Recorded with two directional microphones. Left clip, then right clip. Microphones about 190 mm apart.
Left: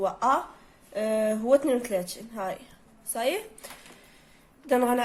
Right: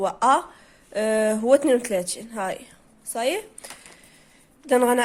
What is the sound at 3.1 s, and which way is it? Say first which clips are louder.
Speech: right 3 dB; 30° right (ahead or behind).